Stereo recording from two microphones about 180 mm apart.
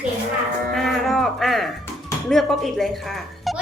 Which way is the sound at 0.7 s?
Centre (ahead or behind).